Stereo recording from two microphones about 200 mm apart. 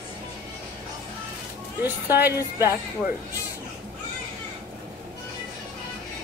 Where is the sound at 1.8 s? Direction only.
10° right (ahead or behind).